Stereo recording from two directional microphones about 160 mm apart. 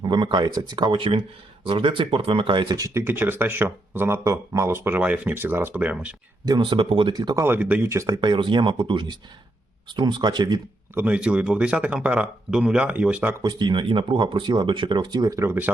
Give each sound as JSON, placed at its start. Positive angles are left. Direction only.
{"t": 0.0, "sound": "speech", "side_deg": -30}
{"t": 6.4, "sound": "speech", "side_deg": -25}
{"t": 10.9, "sound": "speech", "side_deg": -10}
{"t": 13.4, "sound": "speech", "side_deg": -30}